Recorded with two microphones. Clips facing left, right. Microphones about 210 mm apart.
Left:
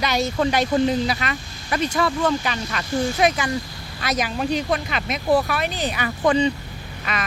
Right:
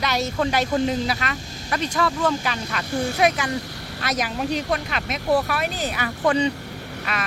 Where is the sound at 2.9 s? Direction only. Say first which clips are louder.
Left 2 dB; 60° right (ahead or behind).